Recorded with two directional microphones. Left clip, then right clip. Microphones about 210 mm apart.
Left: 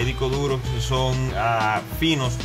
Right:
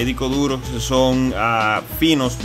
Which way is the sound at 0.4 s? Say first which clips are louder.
Right 4 dB; 50° right (ahead or behind).